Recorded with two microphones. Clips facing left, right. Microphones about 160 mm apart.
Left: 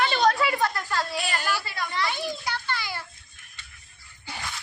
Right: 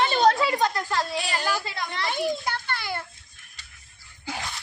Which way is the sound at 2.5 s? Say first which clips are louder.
Right 1 dB; 55° right (ahead or behind).